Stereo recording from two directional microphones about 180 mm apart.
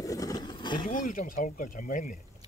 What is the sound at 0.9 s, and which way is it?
Speech, 45° left (ahead or behind).